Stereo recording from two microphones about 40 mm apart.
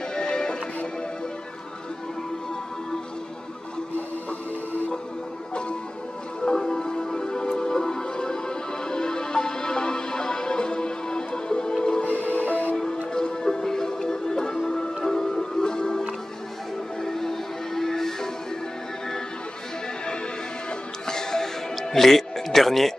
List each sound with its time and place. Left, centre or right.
0.1 s music: centre
6.4 s music: centre
12.0 s music: left
12.7 s music: centre
21.1 s music: centre